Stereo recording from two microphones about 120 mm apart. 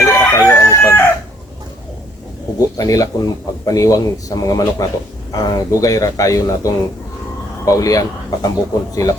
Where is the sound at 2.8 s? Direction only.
30° left (ahead or behind).